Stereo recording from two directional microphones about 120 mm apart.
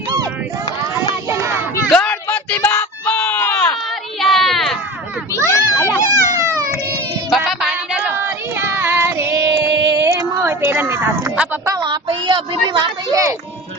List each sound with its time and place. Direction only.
1.9 s a sound: 10° left (ahead or behind)
4.2 s a sound: centre (ahead or behind)
5.3 s children playing: 25° left (ahead or behind)
6.3 s baby cry: 30° right (ahead or behind)
7.3 s music: centre (ahead or behind)
8.1 s child singing: 20° right (ahead or behind)
11.8 s child singing: 40° right (ahead or behind)